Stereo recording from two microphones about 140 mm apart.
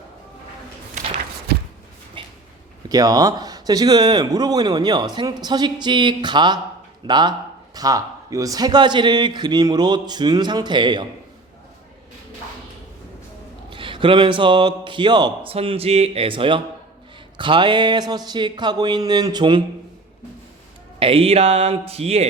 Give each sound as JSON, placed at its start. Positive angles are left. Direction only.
{"t": 2.2, "sound": "a sound", "side_deg": -35}
{"t": 2.9, "sound": "a man's voice", "side_deg": -25}
{"t": 13.7, "sound": "a man's voice", "side_deg": -35}
{"t": 15.5, "sound": "a man's voice", "side_deg": -45}
{"t": 21.0, "sound": "speech", "side_deg": -40}